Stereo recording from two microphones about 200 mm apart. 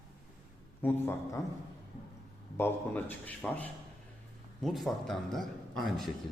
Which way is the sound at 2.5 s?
10° left (ahead or behind).